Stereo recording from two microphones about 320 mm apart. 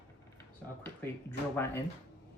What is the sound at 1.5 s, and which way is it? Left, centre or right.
Speech, centre.